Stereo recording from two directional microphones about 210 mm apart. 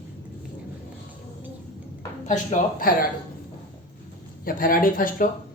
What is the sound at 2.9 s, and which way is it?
Speech, 45° left (ahead or behind).